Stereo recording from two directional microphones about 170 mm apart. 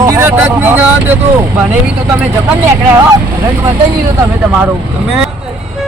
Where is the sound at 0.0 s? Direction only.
15° right (ahead or behind).